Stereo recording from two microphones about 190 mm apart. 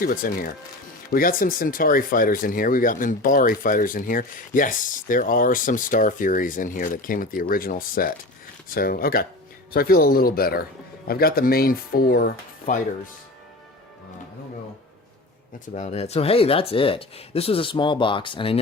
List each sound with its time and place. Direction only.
0.0 s speech: 50° left (ahead or behind)
15.7 s speech: 35° left (ahead or behind)